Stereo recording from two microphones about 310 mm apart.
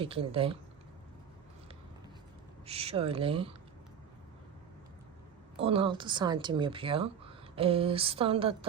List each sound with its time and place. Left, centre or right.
0.0 s speech: centre
2.6 s speech: centre
5.5 s speech: centre